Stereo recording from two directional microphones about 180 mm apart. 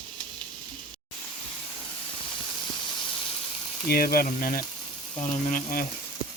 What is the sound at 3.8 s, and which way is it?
Speech, 55° left (ahead or behind).